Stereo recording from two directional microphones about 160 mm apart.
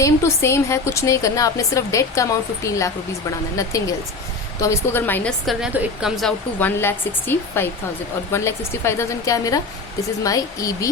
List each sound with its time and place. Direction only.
0.0 s a woman's voice: 20° left (ahead or behind)
5.5 s a woman's voice: 5° right (ahead or behind)
6.6 s a woman's voice: 15° left (ahead or behind)